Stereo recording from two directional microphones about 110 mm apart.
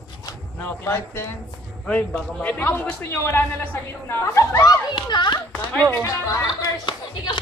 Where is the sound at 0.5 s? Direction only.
20° left (ahead or behind).